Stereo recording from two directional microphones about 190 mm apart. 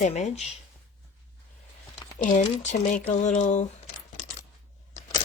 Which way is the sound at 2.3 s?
40° left (ahead or behind).